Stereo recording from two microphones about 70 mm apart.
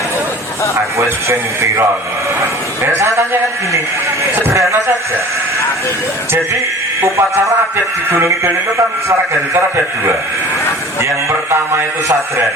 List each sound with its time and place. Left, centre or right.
0.9 s speech: right
7.0 s speech: right
11.3 s speech: right